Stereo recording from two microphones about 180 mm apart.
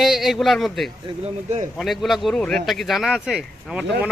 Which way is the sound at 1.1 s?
40° right (ahead or behind).